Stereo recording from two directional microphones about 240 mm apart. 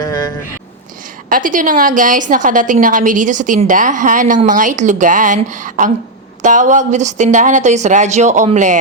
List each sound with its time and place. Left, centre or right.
1.3 s a woman's voice: right